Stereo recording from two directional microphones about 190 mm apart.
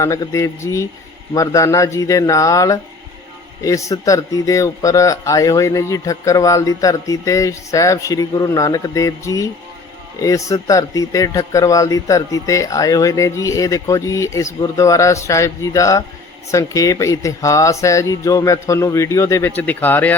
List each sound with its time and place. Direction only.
0.0 s speech: 15° left (ahead or behind)